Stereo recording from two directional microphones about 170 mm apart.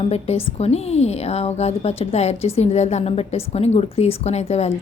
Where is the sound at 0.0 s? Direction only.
40° left (ahead or behind).